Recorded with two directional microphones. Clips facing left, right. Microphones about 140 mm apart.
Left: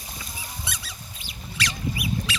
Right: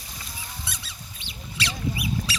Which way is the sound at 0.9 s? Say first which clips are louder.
Left 1 dB; 25° right (ahead or behind).